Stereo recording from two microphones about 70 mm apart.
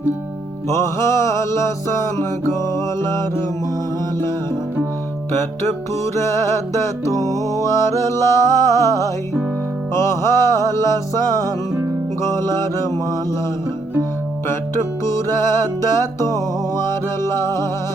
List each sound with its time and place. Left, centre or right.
0.7 s music: left
5.3 s music: left
12.2 s music: left
15.0 s music: left